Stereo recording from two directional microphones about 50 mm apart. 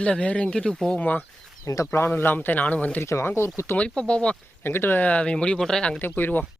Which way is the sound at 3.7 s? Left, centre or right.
Centre.